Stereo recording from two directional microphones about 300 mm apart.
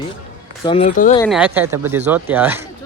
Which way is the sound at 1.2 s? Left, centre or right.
Centre.